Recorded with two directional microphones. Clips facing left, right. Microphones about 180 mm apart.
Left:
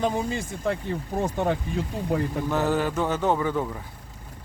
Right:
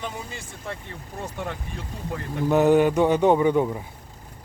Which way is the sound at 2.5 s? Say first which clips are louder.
Right 9 dB; 15° right (ahead or behind).